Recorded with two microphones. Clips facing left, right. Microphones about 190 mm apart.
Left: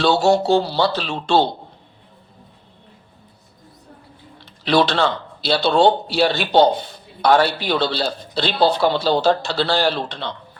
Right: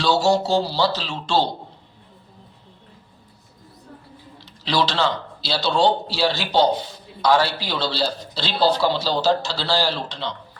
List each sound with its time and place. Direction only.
0.0 s speech: 60° left (ahead or behind)
4.4 s speech: 60° left (ahead or behind)